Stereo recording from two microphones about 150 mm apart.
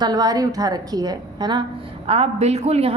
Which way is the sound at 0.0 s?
25° right (ahead or behind).